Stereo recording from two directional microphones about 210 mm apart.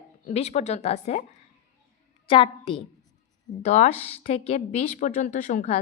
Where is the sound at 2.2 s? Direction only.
25° left (ahead or behind).